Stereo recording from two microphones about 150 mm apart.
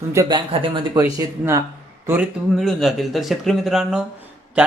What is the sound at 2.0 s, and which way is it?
Speech, 10° right (ahead or behind).